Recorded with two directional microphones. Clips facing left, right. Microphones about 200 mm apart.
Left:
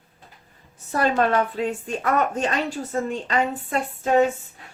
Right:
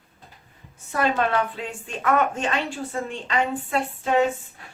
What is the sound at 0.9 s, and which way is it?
Speech, 40° left (ahead or behind).